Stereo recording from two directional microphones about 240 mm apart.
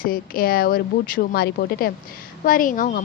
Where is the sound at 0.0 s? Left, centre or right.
Left.